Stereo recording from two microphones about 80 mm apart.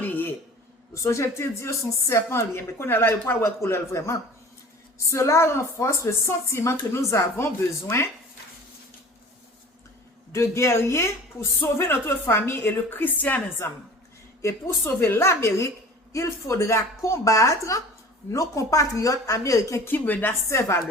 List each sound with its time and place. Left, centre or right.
0.0 s a sound: left
0.9 s a woman's voice: left
10.3 s a woman's voice: left
19.7 s a woman's voice: left